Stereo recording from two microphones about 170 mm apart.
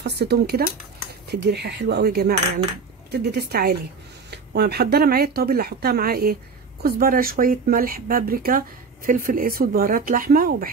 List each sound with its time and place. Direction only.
0.0 s speech: 75° right (ahead or behind); by 10.7 s 55° right (ahead or behind)